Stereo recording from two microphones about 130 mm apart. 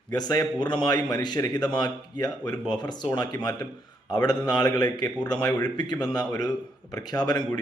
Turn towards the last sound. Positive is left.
turn(degrees=30)  # may be behind; listen again after turning